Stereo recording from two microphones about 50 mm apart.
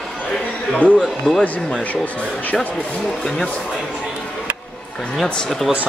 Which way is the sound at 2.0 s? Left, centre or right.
Left.